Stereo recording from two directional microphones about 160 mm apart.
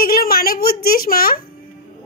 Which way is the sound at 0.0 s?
65° left (ahead or behind).